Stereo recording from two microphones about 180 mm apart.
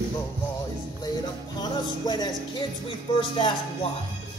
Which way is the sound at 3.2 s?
25° left (ahead or behind).